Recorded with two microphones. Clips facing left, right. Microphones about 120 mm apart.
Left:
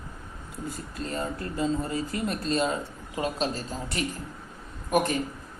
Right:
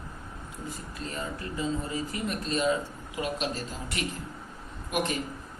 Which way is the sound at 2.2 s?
35° left (ahead or behind).